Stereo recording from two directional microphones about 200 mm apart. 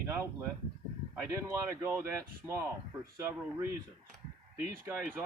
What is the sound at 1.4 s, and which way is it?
Speech, 15° right (ahead or behind).